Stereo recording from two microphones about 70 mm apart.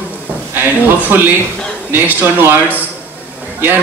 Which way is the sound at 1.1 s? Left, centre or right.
Right.